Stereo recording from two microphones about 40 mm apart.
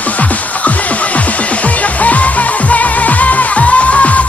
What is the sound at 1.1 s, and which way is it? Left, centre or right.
Music, left.